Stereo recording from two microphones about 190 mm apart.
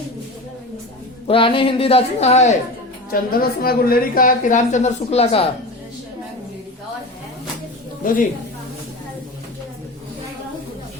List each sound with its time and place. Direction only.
1.3 s speech: 25° left (ahead or behind)
3.1 s a woman's voice: 50° left (ahead or behind); by 5.5 s 30° left (ahead or behind)
8.0 s a woman's voice: 45° left (ahead or behind)